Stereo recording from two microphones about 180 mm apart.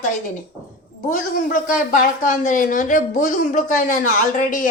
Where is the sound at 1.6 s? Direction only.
45° left (ahead or behind).